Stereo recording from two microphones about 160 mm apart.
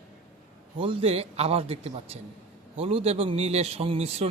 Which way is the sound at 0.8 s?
35° right (ahead or behind).